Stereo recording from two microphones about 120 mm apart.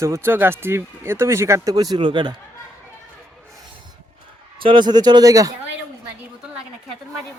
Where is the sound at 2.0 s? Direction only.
45° right (ahead or behind).